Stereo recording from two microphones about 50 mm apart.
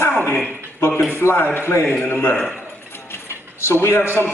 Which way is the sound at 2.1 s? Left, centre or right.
Left.